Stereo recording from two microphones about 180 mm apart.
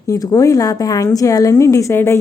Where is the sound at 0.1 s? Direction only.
20° left (ahead or behind).